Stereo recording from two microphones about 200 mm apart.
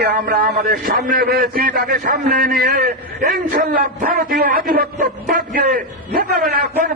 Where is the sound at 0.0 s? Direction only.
50° right (ahead or behind).